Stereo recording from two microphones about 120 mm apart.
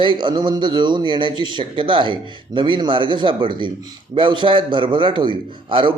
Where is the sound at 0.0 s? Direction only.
40° right (ahead or behind).